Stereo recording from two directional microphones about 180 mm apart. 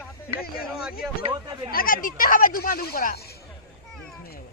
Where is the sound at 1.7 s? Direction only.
50° left (ahead or behind).